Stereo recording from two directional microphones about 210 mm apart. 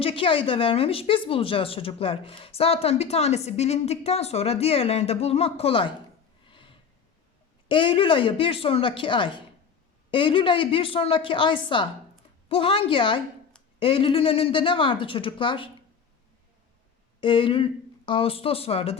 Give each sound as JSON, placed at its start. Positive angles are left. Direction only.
{"t": 0.0, "sound": "a woman's voice", "side_deg": 25}
{"t": 6.5, "sound": "a sound", "side_deg": 25}
{"t": 7.7, "sound": "a woman's voice", "side_deg": 25}
{"t": 17.2, "sound": "speech", "side_deg": 25}